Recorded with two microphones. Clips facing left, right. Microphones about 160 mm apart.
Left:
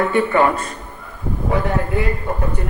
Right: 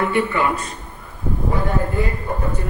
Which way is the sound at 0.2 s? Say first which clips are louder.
Left 7 dB; 45° left (ahead or behind).